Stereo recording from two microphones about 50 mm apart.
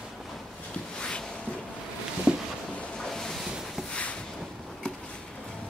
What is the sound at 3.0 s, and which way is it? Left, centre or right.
Ocean, centre.